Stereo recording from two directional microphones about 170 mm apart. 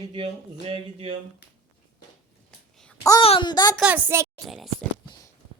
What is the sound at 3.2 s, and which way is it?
Speech, 35° left (ahead or behind).